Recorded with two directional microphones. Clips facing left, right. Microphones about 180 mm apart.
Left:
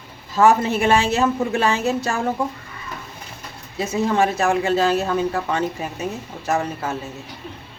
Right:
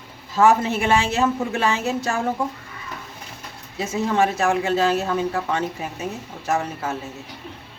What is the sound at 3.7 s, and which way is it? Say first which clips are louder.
Speech: left 1 dB; 35° left (ahead or behind).